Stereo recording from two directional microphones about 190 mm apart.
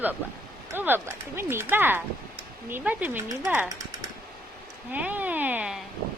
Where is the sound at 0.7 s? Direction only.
10° right (ahead or behind).